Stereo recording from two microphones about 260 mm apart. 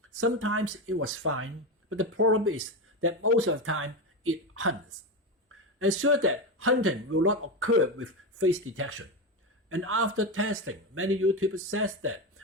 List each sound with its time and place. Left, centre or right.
0.2 s speech: right